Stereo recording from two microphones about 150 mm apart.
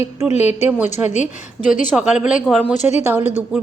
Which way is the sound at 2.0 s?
5° right (ahead or behind).